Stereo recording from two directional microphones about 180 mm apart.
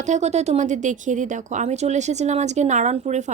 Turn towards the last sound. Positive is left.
turn(degrees=-40)  # may be behind; listen again after turning